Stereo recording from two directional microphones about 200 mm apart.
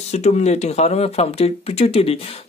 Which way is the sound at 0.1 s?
35° left (ahead or behind).